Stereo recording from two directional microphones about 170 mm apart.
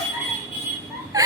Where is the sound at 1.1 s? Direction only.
20° right (ahead or behind).